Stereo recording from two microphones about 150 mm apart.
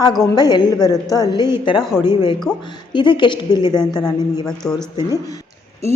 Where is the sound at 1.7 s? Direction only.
Centre (ahead or behind).